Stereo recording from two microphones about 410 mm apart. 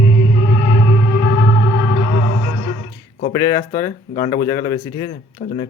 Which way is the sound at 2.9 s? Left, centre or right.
Centre.